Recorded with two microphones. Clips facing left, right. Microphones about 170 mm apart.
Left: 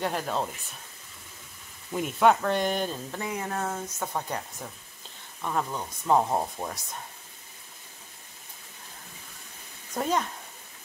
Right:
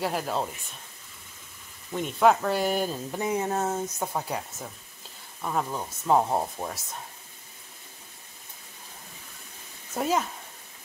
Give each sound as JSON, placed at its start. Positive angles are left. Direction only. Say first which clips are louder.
{"t": 0.0, "sound": "speech", "louder": "right 1 dB", "side_deg": -5}
{"t": 1.9, "sound": "speech", "louder": "even", "side_deg": 5}
{"t": 3.2, "sound": "speech", "louder": "right 6 dB", "side_deg": -20}
{"t": 4.1, "sound": "speech", "louder": "right 1 dB", "side_deg": -5}
{"t": 5.4, "sound": "speech", "louder": "right 1 dB", "side_deg": -5}
{"t": 9.9, "sound": "speech", "louder": "right 1 dB", "side_deg": -5}